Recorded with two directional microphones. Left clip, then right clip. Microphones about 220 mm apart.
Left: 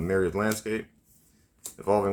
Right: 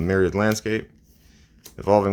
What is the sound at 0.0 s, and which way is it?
Speech, 45° right (ahead or behind).